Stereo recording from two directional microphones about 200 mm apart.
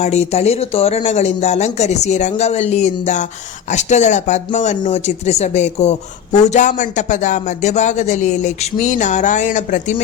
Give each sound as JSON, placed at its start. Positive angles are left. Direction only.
{"t": 0.0, "sound": "speech", "side_deg": 30}